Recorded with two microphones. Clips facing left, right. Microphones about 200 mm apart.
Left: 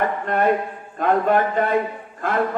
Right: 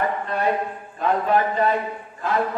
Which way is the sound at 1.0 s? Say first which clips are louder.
Left 3 dB; 50° left (ahead or behind).